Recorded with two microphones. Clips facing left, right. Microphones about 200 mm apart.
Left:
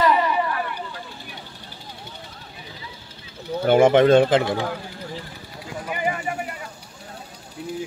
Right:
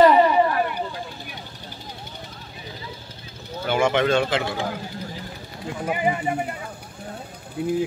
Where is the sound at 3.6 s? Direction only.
45° left (ahead or behind).